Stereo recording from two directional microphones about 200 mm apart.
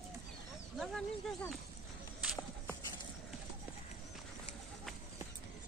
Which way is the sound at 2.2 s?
Centre (ahead or behind).